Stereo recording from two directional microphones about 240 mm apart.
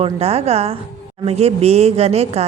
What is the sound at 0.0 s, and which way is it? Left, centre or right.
Speech, right.